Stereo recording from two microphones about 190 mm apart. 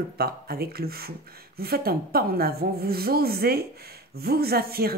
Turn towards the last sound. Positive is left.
turn(degrees=-55)  # may be behind; listen again after turning